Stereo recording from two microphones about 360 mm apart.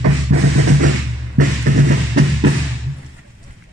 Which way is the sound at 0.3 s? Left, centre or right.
Right.